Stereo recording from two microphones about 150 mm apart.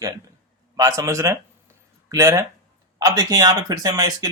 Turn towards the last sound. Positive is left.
turn(degrees=-25)  # may be behind; listen again after turning